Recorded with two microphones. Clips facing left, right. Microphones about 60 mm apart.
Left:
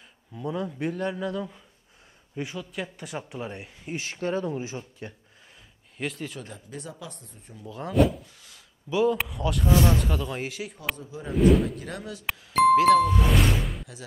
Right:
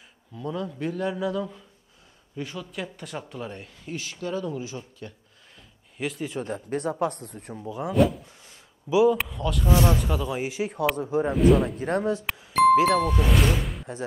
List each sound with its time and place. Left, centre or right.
0.3 s speech: centre
4.0 s speech: left
5.9 s speech: centre
6.4 s speech: right
7.6 s speech: centre
8.9 s speech: centre
9.7 s speech: right
10.0 s speech: centre
11.0 s speech: right
11.3 s speech: centre
11.8 s speech: right
12.7 s speech: centre
13.0 s speech: centre